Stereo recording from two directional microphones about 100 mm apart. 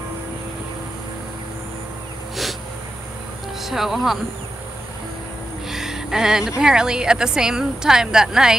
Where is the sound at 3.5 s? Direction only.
5° right (ahead or behind).